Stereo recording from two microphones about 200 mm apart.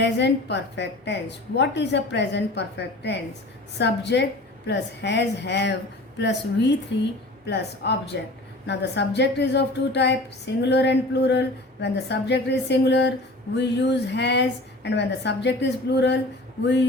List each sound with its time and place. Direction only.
0.0 s a woman's voice: 60° left (ahead or behind)